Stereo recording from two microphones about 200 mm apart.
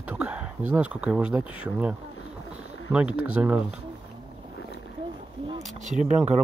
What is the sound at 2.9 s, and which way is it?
Speech, 5° right (ahead or behind).